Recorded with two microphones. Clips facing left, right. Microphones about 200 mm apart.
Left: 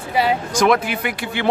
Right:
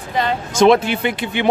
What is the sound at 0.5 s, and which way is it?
Speech, 25° right (ahead or behind).